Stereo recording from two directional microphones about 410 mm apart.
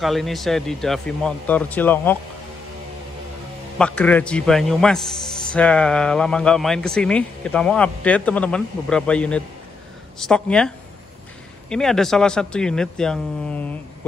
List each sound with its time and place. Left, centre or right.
0.0 s a man's voice: centre
3.7 s a man's voice: centre
11.7 s a man's voice: centre